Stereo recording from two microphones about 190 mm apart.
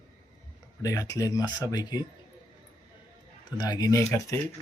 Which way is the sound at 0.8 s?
15° left (ahead or behind).